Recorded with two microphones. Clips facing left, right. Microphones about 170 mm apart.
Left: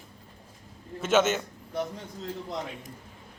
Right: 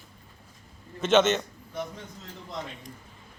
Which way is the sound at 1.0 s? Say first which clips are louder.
Right 2 dB; 5° left (ahead or behind).